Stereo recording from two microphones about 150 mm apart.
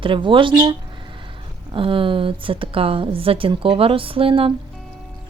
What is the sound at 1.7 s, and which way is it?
Speech, 35° right (ahead or behind).